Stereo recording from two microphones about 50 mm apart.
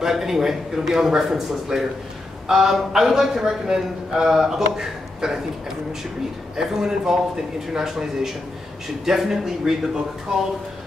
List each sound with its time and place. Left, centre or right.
0.0 s a man's voice: centre
6.5 s a man's voice: centre